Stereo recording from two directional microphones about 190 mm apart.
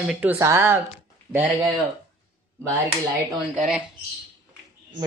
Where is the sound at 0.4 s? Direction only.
15° right (ahead or behind).